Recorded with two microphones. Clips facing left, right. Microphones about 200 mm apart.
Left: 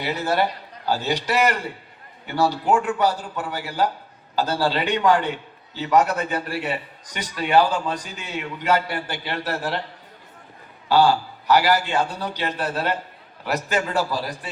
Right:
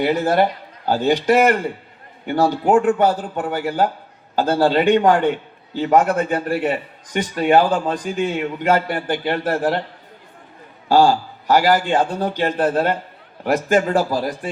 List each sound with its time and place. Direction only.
0.0 s a man's voice: 50° right (ahead or behind)
10.8 s a man's voice: 45° right (ahead or behind)